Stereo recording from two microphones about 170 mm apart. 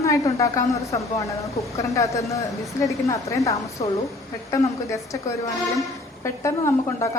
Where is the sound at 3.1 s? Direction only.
20° left (ahead or behind).